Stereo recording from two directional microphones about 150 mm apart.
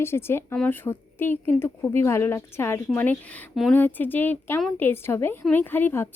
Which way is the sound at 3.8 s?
10° left (ahead or behind).